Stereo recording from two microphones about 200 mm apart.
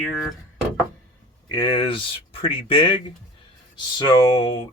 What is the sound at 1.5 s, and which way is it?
Speech, 20° left (ahead or behind).